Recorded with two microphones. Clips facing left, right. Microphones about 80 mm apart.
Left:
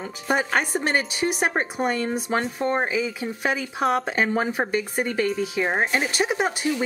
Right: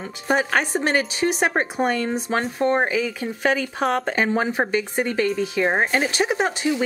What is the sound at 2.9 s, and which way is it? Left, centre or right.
Speech, right.